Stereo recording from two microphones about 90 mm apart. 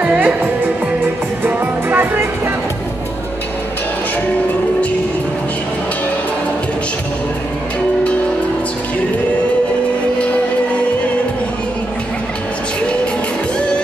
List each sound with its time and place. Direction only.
0.0 s music: 15° right (ahead or behind)